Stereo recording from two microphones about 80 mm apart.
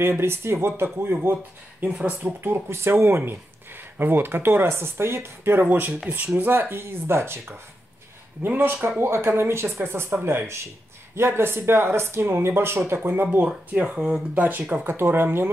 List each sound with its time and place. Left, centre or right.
0.0 s speech: right